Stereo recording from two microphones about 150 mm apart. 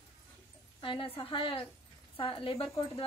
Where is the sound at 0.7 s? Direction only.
35° left (ahead or behind).